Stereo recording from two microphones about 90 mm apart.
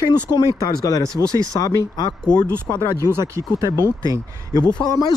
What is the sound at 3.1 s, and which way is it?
Speech, 35° right (ahead or behind).